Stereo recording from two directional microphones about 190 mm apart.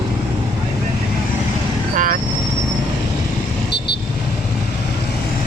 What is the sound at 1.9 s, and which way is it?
Vehicle, 45° right (ahead or behind).